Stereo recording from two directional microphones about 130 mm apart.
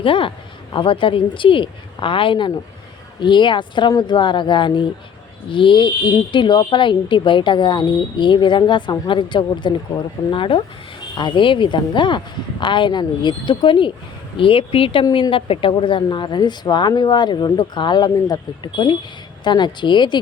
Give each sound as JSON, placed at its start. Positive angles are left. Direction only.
{"t": 0.0, "sound": "a woman's voice", "side_deg": 40}